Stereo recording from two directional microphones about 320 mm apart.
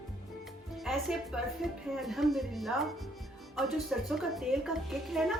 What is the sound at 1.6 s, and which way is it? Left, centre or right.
A woman's voice, centre.